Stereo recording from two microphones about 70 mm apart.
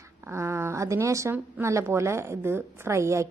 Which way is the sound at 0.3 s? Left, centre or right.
Right.